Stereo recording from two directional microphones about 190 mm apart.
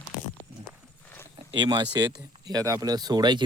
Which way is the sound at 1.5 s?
25° right (ahead or behind).